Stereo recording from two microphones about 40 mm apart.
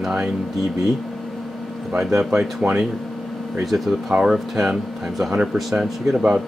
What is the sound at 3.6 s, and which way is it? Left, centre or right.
Speech, centre.